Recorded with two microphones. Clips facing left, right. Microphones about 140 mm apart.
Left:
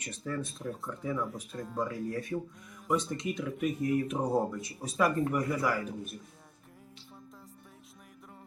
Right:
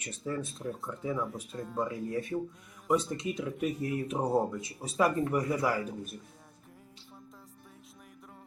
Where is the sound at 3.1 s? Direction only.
35° right (ahead or behind).